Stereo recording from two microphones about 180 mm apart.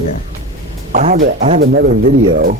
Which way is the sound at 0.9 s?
45° right (ahead or behind).